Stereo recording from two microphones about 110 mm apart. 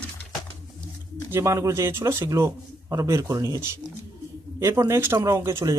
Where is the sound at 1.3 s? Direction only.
25° right (ahead or behind).